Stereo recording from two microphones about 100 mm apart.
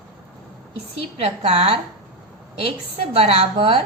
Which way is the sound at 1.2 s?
90° right.